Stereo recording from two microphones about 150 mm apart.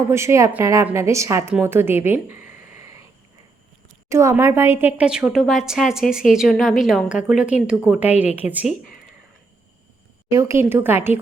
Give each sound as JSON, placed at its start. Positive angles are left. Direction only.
{"t": 0.1, "sound": "a woman's voice", "side_deg": -20}
{"t": 1.6, "sound": "a sound", "side_deg": -15}
{"t": 4.1, "sound": "a woman's voice", "side_deg": -20}
{"t": 10.3, "sound": "a woman's voice", "side_deg": -15}